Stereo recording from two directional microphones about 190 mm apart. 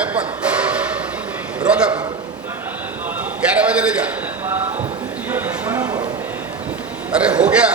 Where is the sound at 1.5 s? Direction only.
5° right (ahead or behind).